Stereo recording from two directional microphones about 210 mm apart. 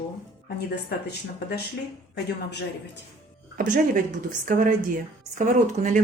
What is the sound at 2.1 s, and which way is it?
Speech, 55° left (ahead or behind).